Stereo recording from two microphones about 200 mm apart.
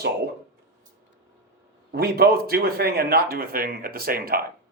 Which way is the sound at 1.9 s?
50° right (ahead or behind).